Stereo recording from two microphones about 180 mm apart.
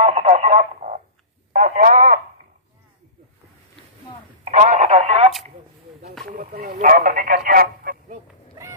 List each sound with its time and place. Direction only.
0.0 s radio: 40° right (ahead or behind)
1.5 s speech: 45° right (ahead or behind)
4.5 s speech: 40° right (ahead or behind)
6.2 s speech: 50° right (ahead or behind)